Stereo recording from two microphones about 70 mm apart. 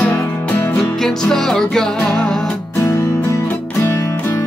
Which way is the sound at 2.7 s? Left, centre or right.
Left.